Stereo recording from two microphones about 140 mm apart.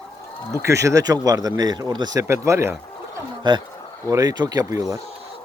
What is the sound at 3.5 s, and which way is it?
Speech, 35° right (ahead or behind).